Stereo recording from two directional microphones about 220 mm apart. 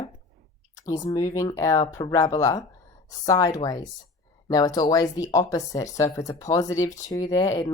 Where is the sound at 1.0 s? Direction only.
15° left (ahead or behind).